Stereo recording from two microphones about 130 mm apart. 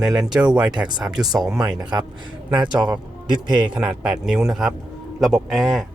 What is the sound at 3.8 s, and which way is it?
Speech, 5° right (ahead or behind).